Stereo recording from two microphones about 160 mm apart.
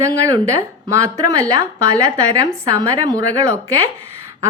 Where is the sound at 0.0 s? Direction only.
20° right (ahead or behind).